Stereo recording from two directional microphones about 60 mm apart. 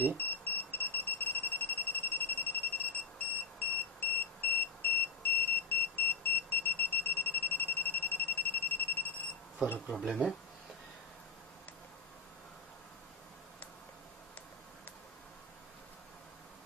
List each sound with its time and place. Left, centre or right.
0.0 s smoke detector: left
3.5 s buzzer: left
9.9 s speech: centre